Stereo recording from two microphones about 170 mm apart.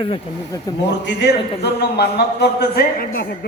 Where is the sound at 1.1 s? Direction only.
80° left.